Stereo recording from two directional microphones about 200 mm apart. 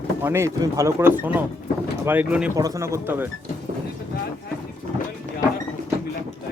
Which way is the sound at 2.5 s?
15° right (ahead or behind).